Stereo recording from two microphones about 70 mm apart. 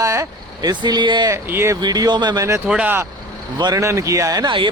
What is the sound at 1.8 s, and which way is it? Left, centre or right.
Speech, right.